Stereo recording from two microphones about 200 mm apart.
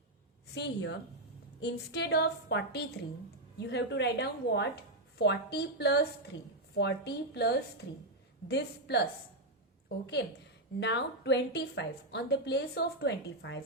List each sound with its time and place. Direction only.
0.5 s a woman's voice: 60° left (ahead or behind)
10.8 s a woman's voice: 60° left (ahead or behind)